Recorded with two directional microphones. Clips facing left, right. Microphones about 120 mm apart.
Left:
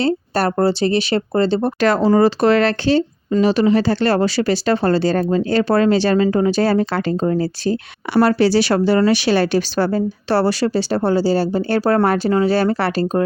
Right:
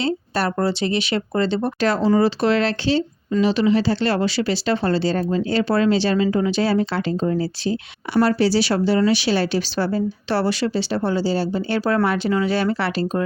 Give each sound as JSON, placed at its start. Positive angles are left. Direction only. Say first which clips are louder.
{"t": 0.0, "sound": "speech", "louder": "left 4 dB", "side_deg": 40}
{"t": 1.8, "sound": "speech", "louder": "left 4 dB", "side_deg": 60}
{"t": 8.1, "sound": "speech", "louder": "left 3 dB", "side_deg": 65}